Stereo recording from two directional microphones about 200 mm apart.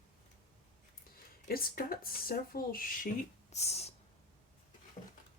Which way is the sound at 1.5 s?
45° left (ahead or behind).